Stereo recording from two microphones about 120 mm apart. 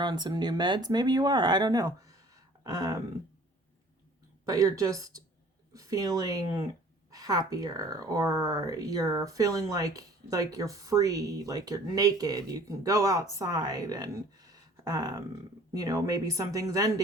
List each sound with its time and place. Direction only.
0.0 s speech: 35° right (ahead or behind)
4.4 s a woman's voice: 30° right (ahead or behind)